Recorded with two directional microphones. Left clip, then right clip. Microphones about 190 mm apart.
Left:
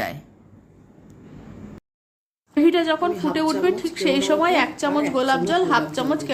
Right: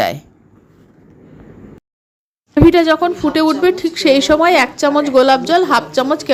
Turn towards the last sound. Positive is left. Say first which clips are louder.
# right 7 dB
turn(degrees=-30)  # may be behind; listen again after turning